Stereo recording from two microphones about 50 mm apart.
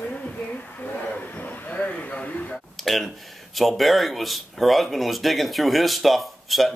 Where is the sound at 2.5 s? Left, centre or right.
Centre.